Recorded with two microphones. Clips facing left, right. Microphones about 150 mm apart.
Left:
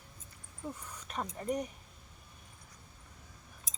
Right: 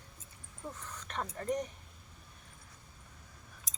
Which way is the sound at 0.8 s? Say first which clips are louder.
Right 3 dB; 10° left (ahead or behind).